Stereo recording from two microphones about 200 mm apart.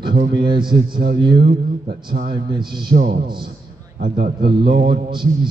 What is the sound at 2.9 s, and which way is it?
A man's voice, 45° right (ahead or behind).